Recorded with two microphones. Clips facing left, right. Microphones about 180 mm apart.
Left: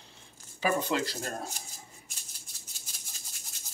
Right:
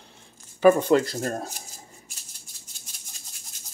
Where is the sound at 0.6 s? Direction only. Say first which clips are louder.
Right 11 dB; 50° right (ahead or behind).